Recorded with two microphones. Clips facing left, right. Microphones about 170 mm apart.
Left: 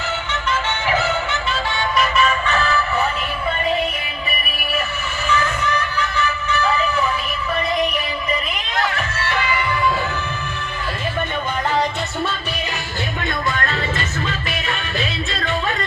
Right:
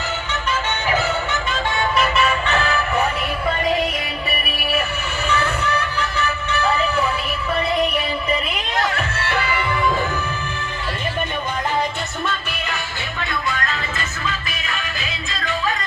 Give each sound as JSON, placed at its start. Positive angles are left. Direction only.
{"t": 1.8, "sound": "music", "side_deg": -35}
{"t": 6.1, "sound": "music", "side_deg": -35}
{"t": 9.0, "sound": "music", "side_deg": -30}
{"t": 13.1, "sound": "music", "side_deg": 50}
{"t": 14.3, "sound": "music", "side_deg": 30}